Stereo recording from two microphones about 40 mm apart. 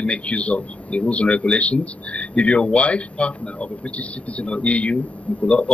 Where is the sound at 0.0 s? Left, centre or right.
Left.